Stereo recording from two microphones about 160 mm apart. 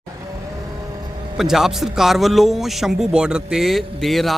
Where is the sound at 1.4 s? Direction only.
Centre (ahead or behind).